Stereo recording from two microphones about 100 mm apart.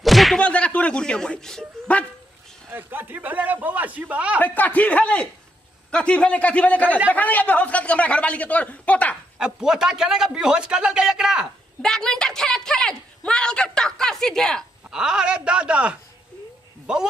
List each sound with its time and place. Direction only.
0.0 s a sound: centre (ahead or behind)
0.4 s speech: 10° left (ahead or behind)
2.7 s a sound: 20° right (ahead or behind)
4.4 s a woman's voice: 15° left (ahead or behind)
9.4 s a man's voice: 5° right (ahead or behind)
11.8 s a woman's voice: 5° left (ahead or behind)
14.9 s a man's voice: 5° right (ahead or behind)